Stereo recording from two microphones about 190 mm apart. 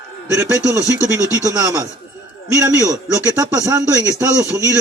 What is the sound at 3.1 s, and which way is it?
Speech, 15° right (ahead or behind).